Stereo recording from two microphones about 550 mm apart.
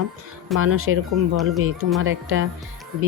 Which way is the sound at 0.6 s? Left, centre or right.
Right.